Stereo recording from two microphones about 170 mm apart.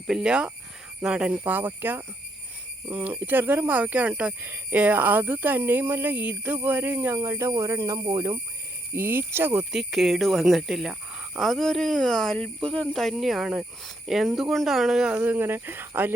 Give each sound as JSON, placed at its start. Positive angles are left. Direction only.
{"t": 0.1, "sound": "speech", "side_deg": -5}
{"t": 8.9, "sound": "speech", "side_deg": -10}
{"t": 9.7, "sound": "speech", "side_deg": 0}